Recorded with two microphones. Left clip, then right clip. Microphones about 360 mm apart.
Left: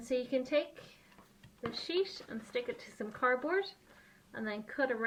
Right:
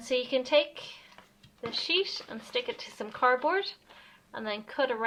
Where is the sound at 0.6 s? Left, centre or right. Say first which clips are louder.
Right 8 dB; right.